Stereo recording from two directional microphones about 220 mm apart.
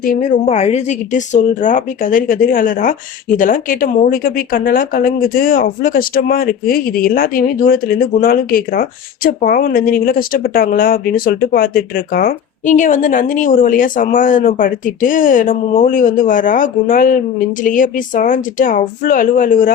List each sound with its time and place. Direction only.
0.0 s speech: 40° left (ahead or behind)